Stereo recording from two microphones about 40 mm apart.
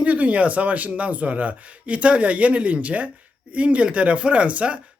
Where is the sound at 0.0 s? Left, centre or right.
Right.